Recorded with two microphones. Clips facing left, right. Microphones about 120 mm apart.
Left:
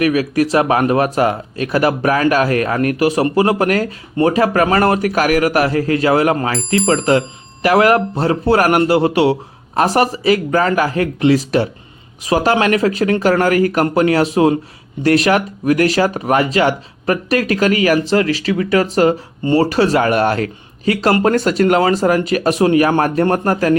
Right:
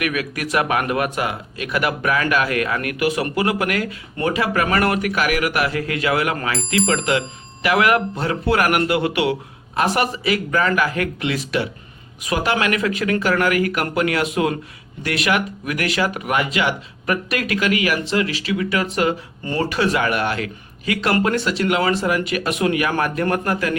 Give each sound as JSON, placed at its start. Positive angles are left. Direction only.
{"t": 0.0, "sound": "speech", "side_deg": 35}